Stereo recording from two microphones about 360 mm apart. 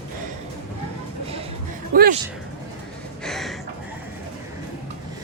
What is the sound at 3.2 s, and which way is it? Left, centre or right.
Gasp, centre.